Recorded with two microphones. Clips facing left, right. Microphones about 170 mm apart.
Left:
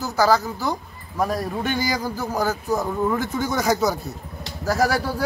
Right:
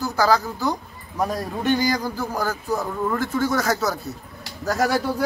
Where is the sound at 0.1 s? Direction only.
10° left (ahead or behind).